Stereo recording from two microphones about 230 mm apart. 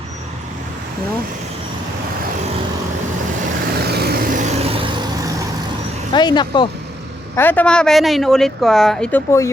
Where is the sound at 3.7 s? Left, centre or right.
Right; by 5.4 s centre.